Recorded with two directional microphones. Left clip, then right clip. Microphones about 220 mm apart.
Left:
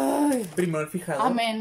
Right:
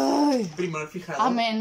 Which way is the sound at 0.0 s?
Centre (ahead or behind).